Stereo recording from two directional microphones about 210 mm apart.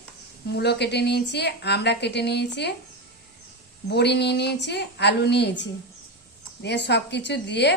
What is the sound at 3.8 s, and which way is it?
A woman's voice, 55° left (ahead or behind).